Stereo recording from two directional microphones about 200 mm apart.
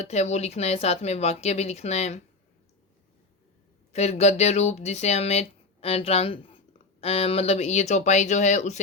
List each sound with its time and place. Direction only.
0.0 s speech: 35° left (ahead or behind)
3.9 s speech: 35° left (ahead or behind)